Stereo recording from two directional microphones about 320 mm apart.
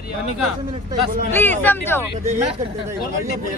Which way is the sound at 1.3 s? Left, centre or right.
Centre.